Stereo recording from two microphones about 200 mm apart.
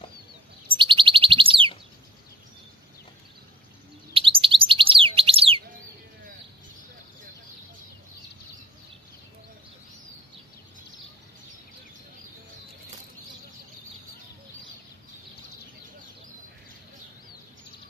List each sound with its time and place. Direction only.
0.7 s bird: 25° right (ahead or behind)
4.1 s bird: 25° right (ahead or behind)